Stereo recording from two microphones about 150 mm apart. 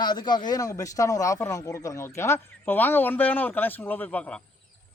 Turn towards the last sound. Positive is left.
turn(degrees=10)  # may be behind; listen again after turning